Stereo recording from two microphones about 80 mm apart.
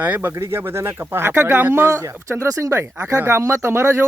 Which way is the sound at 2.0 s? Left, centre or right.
Right.